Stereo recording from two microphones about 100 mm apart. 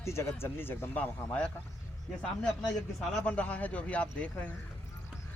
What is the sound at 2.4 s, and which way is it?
Speech, 5° left (ahead or behind).